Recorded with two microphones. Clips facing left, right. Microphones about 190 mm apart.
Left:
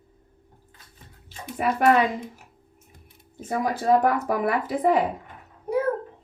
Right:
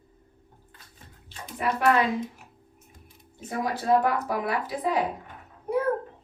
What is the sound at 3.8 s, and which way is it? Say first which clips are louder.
Speech: left 2 dB; 50° left (ahead or behind).